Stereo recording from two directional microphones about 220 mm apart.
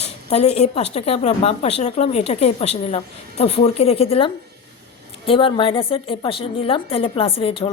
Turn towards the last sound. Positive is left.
turn(degrees=25)  # may be behind; listen again after turning